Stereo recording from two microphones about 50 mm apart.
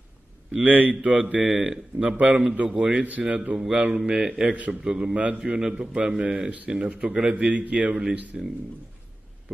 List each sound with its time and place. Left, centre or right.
0.7 s a man's voice: right; by 4.5 s centre
4.5 s a man's voice: right
4.8 s speech: centre
5.1 s a man's voice: right
7.4 s a man's voice: right
8.3 s speech: centre